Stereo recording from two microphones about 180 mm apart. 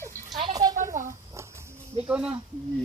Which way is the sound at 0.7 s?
45° right (ahead or behind).